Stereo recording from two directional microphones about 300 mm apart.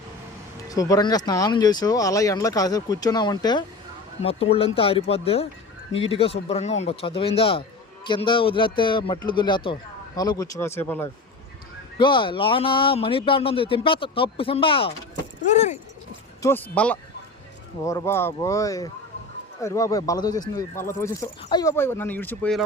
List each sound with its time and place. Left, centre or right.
0.7 s speech: centre
16.4 s speech: centre